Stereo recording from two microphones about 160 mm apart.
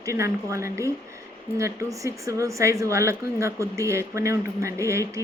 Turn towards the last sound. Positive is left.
turn(degrees=-20)  # may be behind; listen again after turning